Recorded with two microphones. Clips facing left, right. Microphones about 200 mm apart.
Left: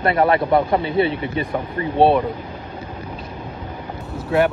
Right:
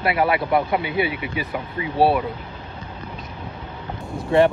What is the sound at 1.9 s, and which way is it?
Speech, 25° left (ahead or behind).